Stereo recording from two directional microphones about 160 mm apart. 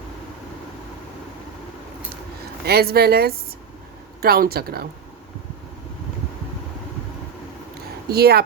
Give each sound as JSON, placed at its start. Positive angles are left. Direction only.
{"t": 2.6, "sound": "speech", "side_deg": -80}
{"t": 8.1, "sound": "speech", "side_deg": -80}